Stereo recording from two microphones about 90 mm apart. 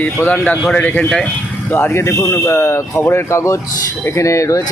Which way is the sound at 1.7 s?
25° left (ahead or behind).